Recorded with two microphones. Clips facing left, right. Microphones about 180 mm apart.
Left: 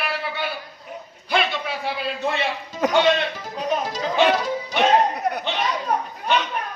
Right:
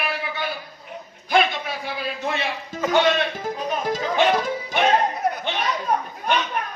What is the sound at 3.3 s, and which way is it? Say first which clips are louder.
Music: left 1 dB; 50° right (ahead or behind).